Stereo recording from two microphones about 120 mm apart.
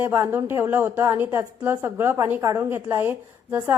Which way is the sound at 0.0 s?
20° right (ahead or behind).